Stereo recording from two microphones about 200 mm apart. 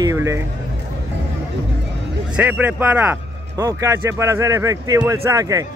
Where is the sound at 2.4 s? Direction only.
10° right (ahead or behind).